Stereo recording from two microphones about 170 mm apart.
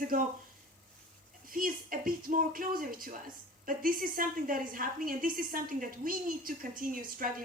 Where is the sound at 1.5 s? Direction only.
55° right (ahead or behind).